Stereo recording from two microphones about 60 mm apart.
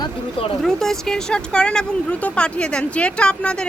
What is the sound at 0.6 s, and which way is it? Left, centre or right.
Speech, centre.